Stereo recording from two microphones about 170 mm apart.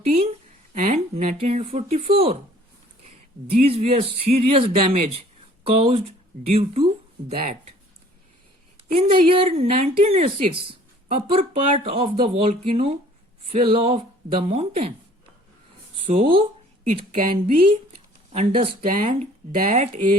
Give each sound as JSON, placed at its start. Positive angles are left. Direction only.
{"t": 0.0, "sound": "a sound", "side_deg": -40}
{"t": 3.5, "sound": "speech", "side_deg": -35}
{"t": 8.9, "sound": "speech", "side_deg": -35}
{"t": 16.0, "sound": "speech", "side_deg": -30}